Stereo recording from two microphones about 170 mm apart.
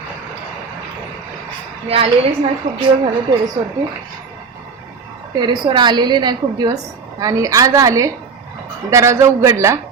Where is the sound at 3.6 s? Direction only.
35° right (ahead or behind).